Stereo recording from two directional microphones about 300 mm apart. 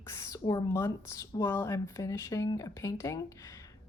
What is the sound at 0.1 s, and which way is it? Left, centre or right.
Speech, centre.